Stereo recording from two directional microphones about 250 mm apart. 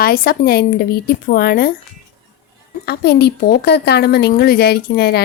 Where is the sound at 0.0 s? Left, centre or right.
Left.